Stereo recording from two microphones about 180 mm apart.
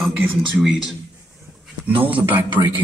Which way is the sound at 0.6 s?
Centre (ahead or behind).